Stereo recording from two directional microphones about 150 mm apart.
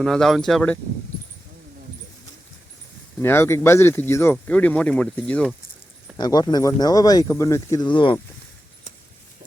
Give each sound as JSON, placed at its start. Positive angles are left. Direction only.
{"t": 0.0, "sound": "speech", "side_deg": 5}
{"t": 3.2, "sound": "speech", "side_deg": 15}
{"t": 6.1, "sound": "speech", "side_deg": 30}